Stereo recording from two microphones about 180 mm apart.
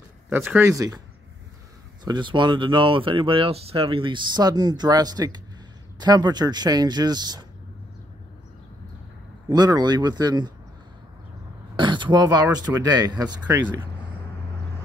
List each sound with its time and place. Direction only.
0.3 s speech: 10° right (ahead or behind)
2.0 s speech: 25° right (ahead or behind)
9.5 s speech: 20° right (ahead or behind)
11.7 s throat clearing: 25° right (ahead or behind)
12.5 s speech: 25° right (ahead or behind)
13.5 s speech: 10° right (ahead or behind)